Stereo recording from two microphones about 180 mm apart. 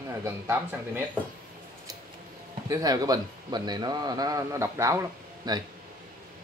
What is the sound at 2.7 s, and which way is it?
Speech, 20° right (ahead or behind).